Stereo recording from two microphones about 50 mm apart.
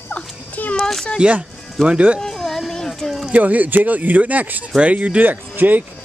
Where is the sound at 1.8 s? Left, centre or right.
Right.